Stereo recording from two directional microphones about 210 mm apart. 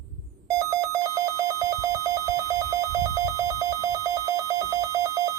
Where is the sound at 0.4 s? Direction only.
15° right (ahead or behind).